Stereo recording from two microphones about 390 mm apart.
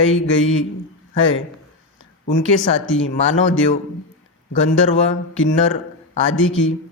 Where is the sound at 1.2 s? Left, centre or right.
Left.